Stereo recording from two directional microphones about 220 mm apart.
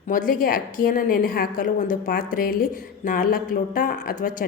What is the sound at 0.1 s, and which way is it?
A woman's voice, 40° left (ahead or behind).